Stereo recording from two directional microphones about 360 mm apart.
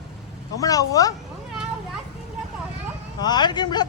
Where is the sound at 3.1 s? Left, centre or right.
Centre.